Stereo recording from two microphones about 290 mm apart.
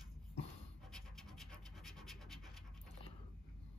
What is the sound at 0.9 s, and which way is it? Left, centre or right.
Scratch, centre.